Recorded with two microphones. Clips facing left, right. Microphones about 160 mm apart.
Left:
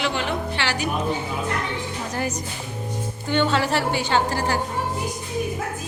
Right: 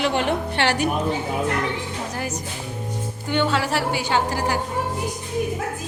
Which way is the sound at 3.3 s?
5° right (ahead or behind).